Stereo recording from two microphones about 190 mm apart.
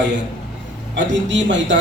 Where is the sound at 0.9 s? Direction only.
75° right (ahead or behind).